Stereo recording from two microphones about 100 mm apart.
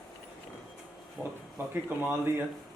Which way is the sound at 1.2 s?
20° right (ahead or behind).